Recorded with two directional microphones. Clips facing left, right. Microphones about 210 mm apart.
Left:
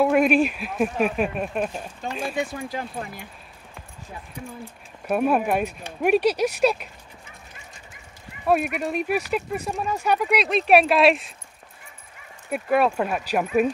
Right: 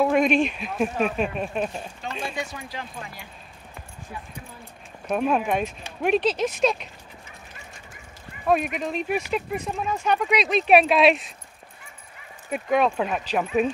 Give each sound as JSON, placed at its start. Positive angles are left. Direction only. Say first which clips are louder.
{"t": 0.0, "sound": "speech", "louder": "left 2 dB", "side_deg": 5}
{"t": 2.7, "sound": "speech", "louder": "left 5 dB", "side_deg": 40}
{"t": 5.0, "sound": "speech", "louder": "left 2 dB", "side_deg": 10}
{"t": 8.5, "sound": "speech", "louder": "left 1 dB", "side_deg": 5}
{"t": 12.4, "sound": "speech", "louder": "left 1 dB", "side_deg": 5}